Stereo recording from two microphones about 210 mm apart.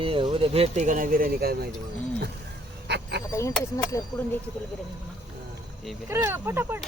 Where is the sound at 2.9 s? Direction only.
55° right (ahead or behind).